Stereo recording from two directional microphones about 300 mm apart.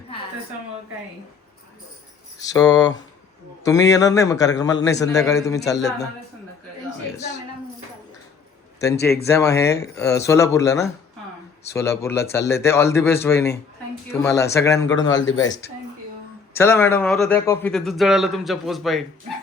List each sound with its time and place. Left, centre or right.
2.4 s a man's voice: centre
9.2 s a man's voice: centre
14.9 s a man's voice: left
16.6 s speech: centre